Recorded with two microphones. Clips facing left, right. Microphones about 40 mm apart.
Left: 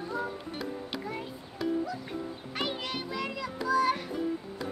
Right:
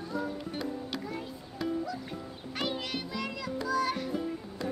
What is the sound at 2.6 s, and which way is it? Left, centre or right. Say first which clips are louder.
Music: even; centre.